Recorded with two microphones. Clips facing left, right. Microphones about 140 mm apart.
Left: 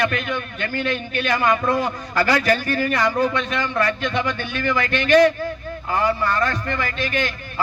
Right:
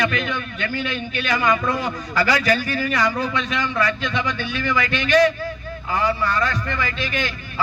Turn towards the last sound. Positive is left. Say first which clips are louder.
# left 2 dB
turn(degrees=50)  # may be behind; listen again after turning